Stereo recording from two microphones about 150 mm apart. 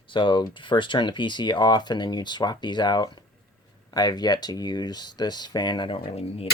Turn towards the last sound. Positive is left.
turn(degrees=40)  # may be behind; listen again after turning